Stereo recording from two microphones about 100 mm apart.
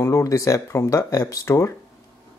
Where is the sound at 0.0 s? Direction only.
30° left (ahead or behind).